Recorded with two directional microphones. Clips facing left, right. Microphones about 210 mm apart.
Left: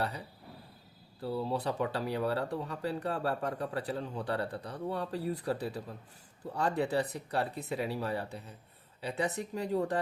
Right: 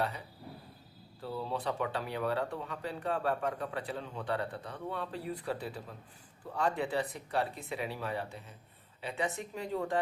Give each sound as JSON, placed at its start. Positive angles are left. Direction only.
{"t": 1.2, "sound": "speech", "side_deg": 35}